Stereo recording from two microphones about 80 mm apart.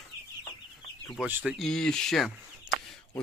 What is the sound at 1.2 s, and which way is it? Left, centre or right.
Speech, centre.